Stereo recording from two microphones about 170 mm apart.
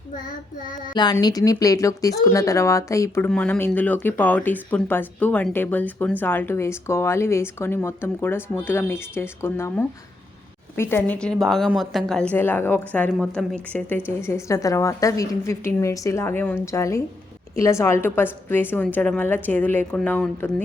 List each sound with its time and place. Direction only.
0.9 s speech: 25° left (ahead or behind)
3.2 s a woman's voice: 5° left (ahead or behind)